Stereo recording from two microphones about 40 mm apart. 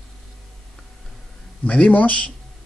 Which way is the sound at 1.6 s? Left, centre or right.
Left.